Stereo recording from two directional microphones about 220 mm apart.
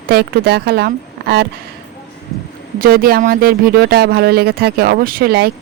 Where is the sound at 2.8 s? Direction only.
40° right (ahead or behind).